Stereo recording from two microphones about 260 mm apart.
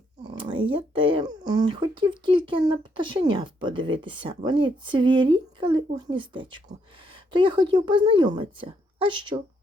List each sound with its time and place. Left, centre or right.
0.3 s a woman's voice: centre